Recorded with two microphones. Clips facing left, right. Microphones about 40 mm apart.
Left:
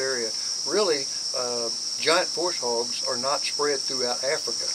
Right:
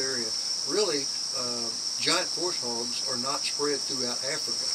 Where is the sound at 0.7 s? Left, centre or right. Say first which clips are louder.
Left 4 dB; left.